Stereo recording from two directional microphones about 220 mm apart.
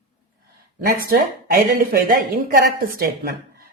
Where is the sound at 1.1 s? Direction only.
45° right (ahead or behind).